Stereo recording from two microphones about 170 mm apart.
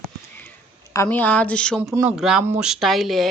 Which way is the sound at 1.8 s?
15° right (ahead or behind).